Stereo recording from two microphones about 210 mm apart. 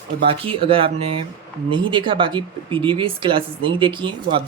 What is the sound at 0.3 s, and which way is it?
Speech, 25° right (ahead or behind).